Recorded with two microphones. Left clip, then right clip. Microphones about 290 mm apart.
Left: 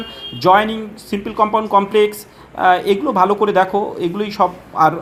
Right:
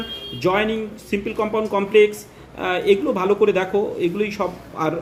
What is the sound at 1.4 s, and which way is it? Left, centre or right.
Speech, centre.